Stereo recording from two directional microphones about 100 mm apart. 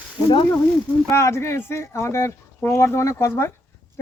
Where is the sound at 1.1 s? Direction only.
30° left (ahead or behind).